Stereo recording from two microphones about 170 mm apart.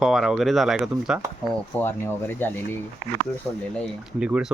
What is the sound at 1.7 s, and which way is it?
Speech, 15° left (ahead or behind).